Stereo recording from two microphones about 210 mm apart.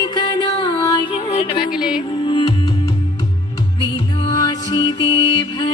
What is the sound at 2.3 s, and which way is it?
Music, 20° left (ahead or behind).